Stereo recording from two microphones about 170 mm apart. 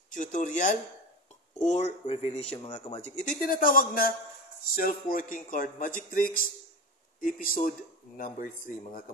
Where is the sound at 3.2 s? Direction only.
55° left (ahead or behind).